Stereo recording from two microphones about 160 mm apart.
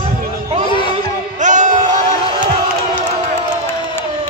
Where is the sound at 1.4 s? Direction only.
50° right (ahead or behind).